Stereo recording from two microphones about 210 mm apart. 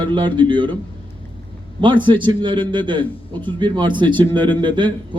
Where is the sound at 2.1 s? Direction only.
25° right (ahead or behind).